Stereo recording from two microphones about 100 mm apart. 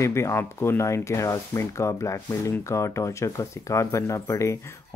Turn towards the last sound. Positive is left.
turn(degrees=30)  # may be behind; listen again after turning